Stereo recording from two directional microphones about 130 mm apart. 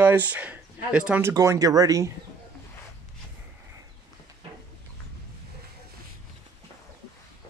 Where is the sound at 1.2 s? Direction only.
25° right (ahead or behind).